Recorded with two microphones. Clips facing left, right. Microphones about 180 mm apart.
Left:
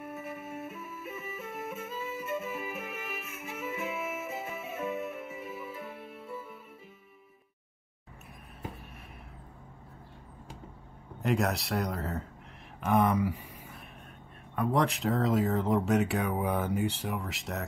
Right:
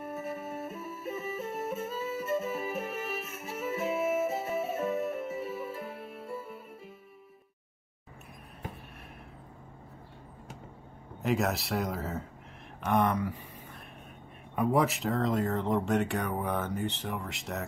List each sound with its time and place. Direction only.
0.0 s music: 40° right (ahead or behind)
11.2 s speech: centre (ahead or behind)
14.5 s speech: 10° right (ahead or behind)